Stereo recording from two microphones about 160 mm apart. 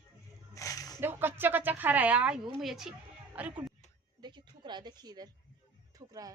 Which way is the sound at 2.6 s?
5° right (ahead or behind).